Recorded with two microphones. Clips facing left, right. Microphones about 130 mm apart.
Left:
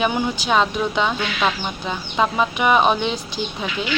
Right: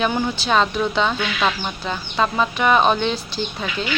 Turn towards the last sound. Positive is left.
turn(degrees=15)  # may be behind; listen again after turning